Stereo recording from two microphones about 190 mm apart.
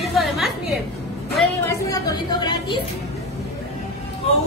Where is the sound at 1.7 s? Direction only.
20° left (ahead or behind).